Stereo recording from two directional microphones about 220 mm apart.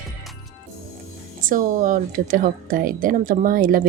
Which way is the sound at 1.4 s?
40° right (ahead or behind).